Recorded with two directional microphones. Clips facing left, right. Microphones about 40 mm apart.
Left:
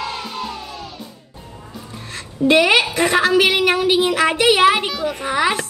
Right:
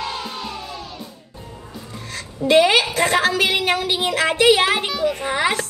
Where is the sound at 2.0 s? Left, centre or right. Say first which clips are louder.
Left 3 dB; left.